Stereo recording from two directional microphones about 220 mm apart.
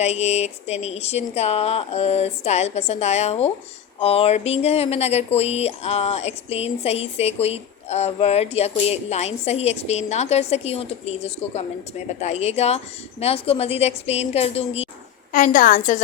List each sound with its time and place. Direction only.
0.0 s a woman's voice: 30° left (ahead or behind)